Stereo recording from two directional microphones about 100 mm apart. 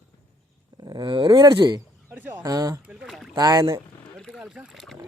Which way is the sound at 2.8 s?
10° right (ahead or behind).